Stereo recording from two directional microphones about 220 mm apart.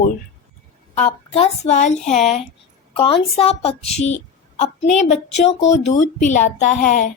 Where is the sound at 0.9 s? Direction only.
30° left (ahead or behind).